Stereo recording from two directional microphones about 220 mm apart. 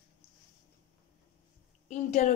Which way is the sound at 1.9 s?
35° left (ahead or behind).